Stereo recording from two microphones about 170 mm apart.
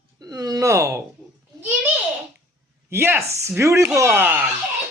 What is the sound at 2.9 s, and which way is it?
Speech, 15° right (ahead or behind).